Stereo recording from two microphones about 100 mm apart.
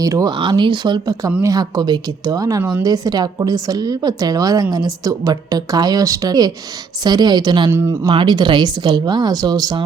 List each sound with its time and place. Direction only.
0.0 s a woman's voice: 35° right (ahead or behind)
0.3 s speech: 55° right (ahead or behind)
1.4 s a woman's voice: 35° right (ahead or behind)
7.7 s speech: 30° right (ahead or behind)
8.0 s speech: 50° right (ahead or behind)